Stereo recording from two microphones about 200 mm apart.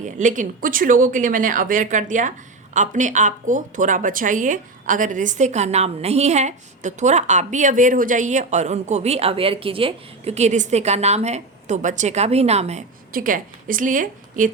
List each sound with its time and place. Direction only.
0.0 s a woman's voice: 40° right (ahead or behind)
13.1 s a woman's voice: 45° right (ahead or behind)